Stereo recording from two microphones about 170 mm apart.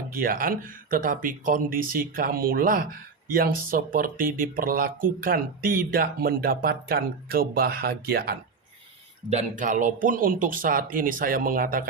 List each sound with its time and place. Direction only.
0.1 s speech: 55° right (ahead or behind)
9.3 s speech: 50° right (ahead or behind)